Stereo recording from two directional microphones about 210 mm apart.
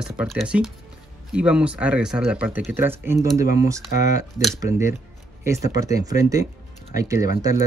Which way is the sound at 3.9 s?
35° left (ahead or behind).